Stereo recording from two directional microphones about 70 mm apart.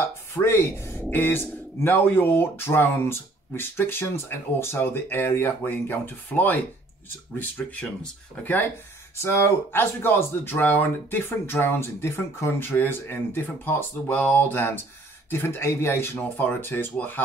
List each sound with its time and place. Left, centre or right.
0.4 s speech: left
7.6 s speech: centre
9.2 s speech: left
15.3 s speech: left